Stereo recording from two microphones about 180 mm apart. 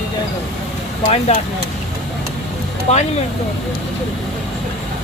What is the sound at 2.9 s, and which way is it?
Speech, 40° left (ahead or behind).